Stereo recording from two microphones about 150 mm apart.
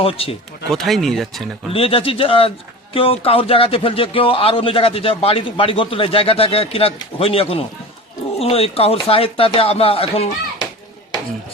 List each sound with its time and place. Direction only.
0.0 s speech: 40° left (ahead or behind)
0.7 s speech: centre (ahead or behind)
1.7 s speech: 40° left (ahead or behind)